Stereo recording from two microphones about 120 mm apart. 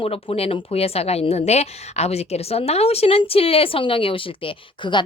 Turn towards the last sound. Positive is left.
turn(degrees=40)  # may be behind; listen again after turning